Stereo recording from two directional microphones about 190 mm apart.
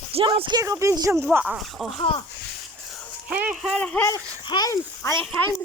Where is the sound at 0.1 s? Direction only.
30° right (ahead or behind); by 1.9 s 5° right (ahead or behind).